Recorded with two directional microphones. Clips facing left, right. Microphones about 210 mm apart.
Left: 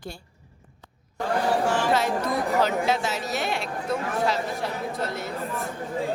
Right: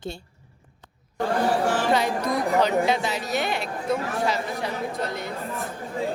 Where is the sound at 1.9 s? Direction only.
5° left (ahead or behind).